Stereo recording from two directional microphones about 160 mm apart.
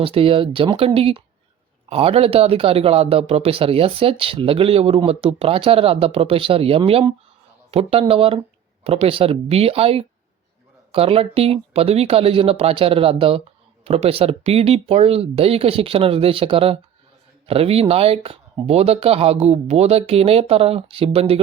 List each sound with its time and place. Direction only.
0.0 s speech: 35° right (ahead or behind)